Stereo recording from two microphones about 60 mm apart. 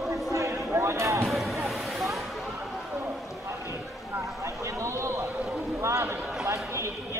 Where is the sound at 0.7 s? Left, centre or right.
Right.